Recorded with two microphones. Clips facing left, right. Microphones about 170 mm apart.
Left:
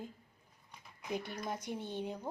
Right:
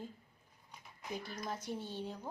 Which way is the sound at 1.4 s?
15° left (ahead or behind).